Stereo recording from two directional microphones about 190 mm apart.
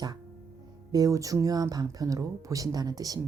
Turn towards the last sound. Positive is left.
turn(degrees=-20)  # may be behind; listen again after turning